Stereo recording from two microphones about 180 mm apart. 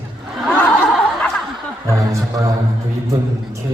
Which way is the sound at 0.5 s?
5° left (ahead or behind).